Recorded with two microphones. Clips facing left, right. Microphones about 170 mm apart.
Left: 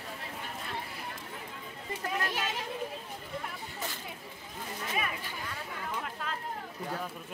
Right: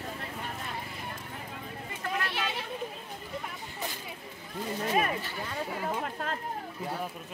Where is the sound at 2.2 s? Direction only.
40° left (ahead or behind).